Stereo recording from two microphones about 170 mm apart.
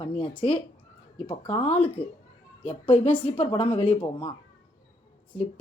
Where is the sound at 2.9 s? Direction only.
10° left (ahead or behind).